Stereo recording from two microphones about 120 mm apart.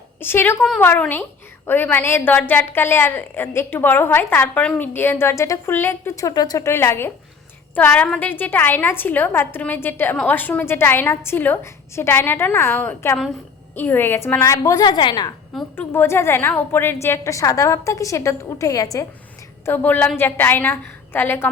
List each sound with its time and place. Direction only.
0.2 s a woman's voice: 20° left (ahead or behind); by 15.3 s 40° left (ahead or behind)
15.7 s a woman's voice: 20° left (ahead or behind)
19.6 s a woman's voice: 15° left (ahead or behind)